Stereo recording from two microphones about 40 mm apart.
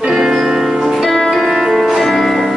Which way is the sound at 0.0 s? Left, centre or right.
Centre.